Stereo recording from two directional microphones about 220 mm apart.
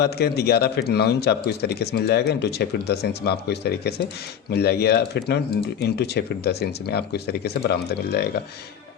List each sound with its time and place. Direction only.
0.0 s speech: 45° left (ahead or behind)